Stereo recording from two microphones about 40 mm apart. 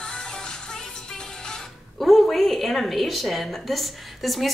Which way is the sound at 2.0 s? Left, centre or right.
Centre.